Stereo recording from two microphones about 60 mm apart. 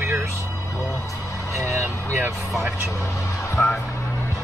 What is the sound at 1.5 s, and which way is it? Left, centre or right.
Speech, right.